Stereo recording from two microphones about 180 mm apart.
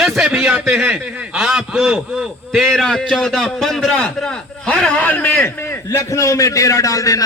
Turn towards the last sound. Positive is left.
turn(degrees=20)  # may be behind; listen again after turning